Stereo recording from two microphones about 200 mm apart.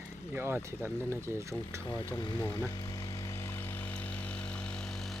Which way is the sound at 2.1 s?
20° left (ahead or behind).